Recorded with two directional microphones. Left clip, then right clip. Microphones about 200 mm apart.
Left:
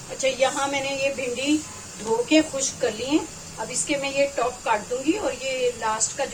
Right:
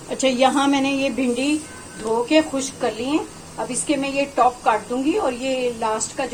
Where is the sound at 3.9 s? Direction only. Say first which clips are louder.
Even; 40° right (ahead or behind).